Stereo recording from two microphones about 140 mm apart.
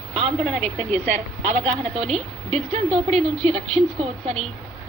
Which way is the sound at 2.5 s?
50° right (ahead or behind).